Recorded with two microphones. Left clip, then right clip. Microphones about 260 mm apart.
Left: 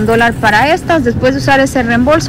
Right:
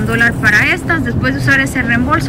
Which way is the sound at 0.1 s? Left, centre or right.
Centre.